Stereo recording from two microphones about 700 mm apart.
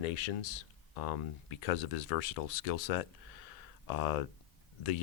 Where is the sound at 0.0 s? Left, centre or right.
Left.